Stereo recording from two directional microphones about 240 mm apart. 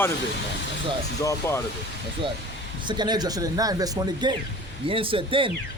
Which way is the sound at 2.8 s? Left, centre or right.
Centre.